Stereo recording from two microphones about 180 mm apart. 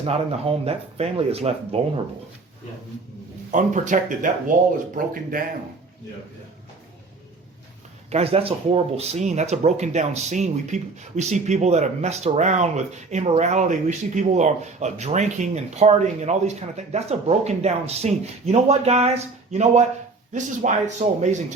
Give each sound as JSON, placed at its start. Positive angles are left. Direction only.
{"t": 0.0, "sound": "speech", "side_deg": -35}
{"t": 3.5, "sound": "speech", "side_deg": -45}
{"t": 8.1, "sound": "speech", "side_deg": -35}